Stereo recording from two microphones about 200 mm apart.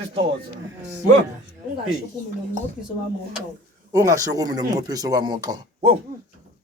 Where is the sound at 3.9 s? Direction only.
15° right (ahead or behind).